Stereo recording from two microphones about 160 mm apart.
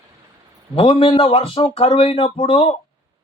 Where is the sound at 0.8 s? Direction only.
35° left (ahead or behind).